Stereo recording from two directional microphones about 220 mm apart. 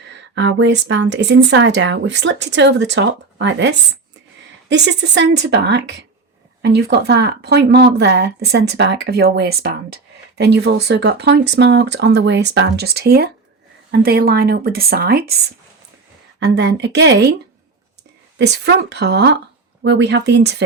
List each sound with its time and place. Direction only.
0.3 s speech: 55° right (ahead or behind)
16.4 s speech: 50° right (ahead or behind)
18.3 s speech: 50° right (ahead or behind)